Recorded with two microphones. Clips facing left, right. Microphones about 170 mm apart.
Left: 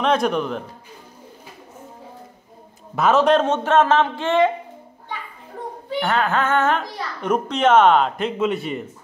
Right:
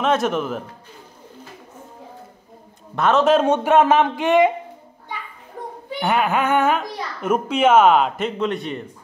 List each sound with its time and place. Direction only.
0.0 s a man's voice: 5° right (ahead or behind)
3.0 s a child's voice: centre (ahead or behind); by 4.5 s 15° right (ahead or behind)
5.9 s a child's voice: 15° right (ahead or behind); by 8.8 s 5° left (ahead or behind)